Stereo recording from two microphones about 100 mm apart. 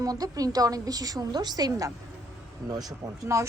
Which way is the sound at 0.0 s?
40° right (ahead or behind).